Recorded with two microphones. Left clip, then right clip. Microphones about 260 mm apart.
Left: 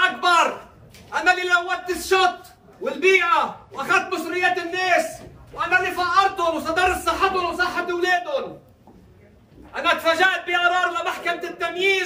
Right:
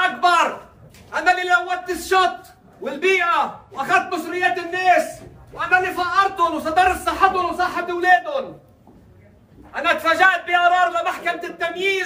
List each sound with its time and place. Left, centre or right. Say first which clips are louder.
0.0 s a sound: right 1 dB; centre
1.1 s a man's voice: right 1 dB; centre
9.7 s a man's voice: right 1 dB; centre